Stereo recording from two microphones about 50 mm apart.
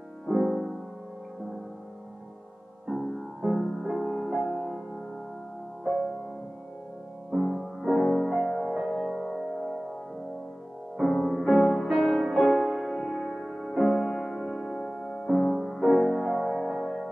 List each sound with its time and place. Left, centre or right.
0.3 s music: centre
2.9 s music: centre
3.5 s music: centre
3.8 s music: centre
5.9 s music: centre
7.2 s music: centre
11.0 s music: centre
11.2 s music: centre
15.6 s music: centre